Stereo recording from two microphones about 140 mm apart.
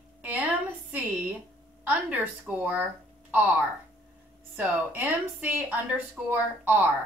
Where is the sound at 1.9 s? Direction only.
10° right (ahead or behind).